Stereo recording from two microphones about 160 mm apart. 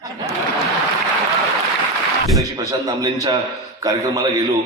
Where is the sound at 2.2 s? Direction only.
20° right (ahead or behind).